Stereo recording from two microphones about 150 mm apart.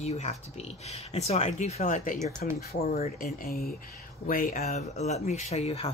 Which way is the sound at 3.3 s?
90° left.